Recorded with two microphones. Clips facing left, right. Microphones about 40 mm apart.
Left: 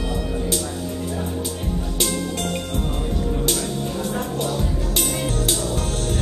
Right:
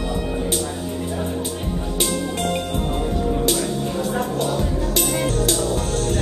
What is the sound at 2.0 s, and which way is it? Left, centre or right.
Music, centre.